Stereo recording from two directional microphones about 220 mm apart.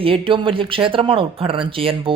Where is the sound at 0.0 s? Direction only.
25° right (ahead or behind).